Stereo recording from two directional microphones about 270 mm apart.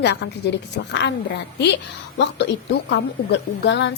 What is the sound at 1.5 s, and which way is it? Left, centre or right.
A woman's voice, left.